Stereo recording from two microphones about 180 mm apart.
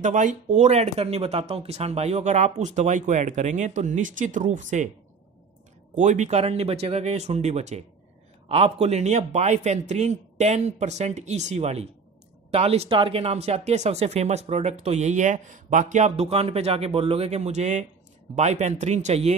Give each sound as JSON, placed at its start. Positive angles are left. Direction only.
{"t": 0.0, "sound": "speech", "side_deg": -45}
{"t": 5.9, "sound": "speech", "side_deg": -40}